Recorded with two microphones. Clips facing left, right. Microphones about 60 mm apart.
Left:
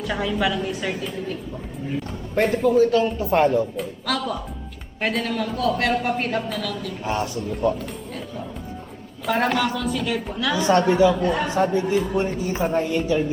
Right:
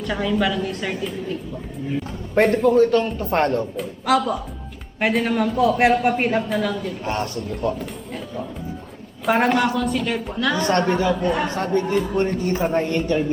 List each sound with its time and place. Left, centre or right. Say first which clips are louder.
0.0 s speech: right 2 dB; centre
2.3 s speech: right 3 dB; centre
4.0 s a woman's voice: right 8 dB; centre
7.0 s speech: even; centre
9.5 s a woman's voice: right 3 dB; centre
10.6 s speech: left 5 dB; centre